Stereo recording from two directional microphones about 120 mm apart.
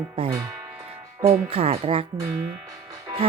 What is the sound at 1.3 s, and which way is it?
Speech, 55° right (ahead or behind).